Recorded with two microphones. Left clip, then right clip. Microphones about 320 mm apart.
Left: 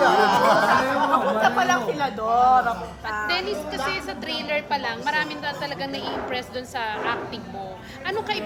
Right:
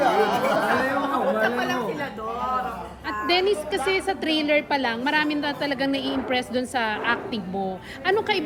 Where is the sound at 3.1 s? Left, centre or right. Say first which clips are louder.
Right 3 dB; right.